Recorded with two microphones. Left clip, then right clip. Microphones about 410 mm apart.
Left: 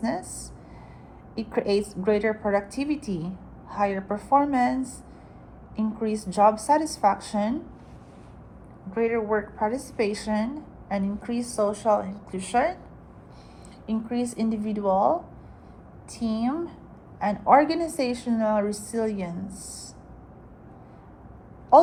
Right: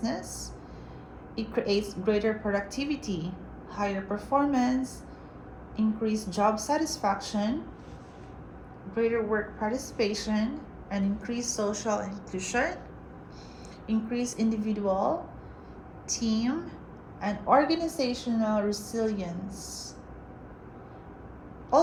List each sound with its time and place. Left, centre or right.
0.0 s a woman's voice: centre
1.4 s a woman's voice: centre
8.9 s a woman's voice: centre
13.8 s a woman's voice: centre